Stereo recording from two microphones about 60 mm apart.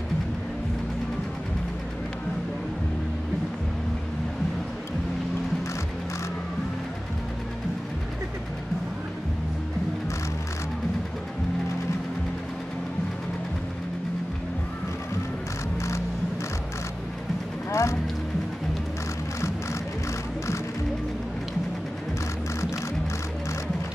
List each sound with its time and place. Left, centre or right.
17.6 s clip-clop: left